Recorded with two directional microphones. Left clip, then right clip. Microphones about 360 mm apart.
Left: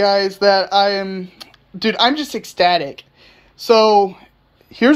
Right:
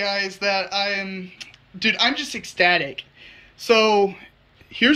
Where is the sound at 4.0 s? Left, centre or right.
Centre.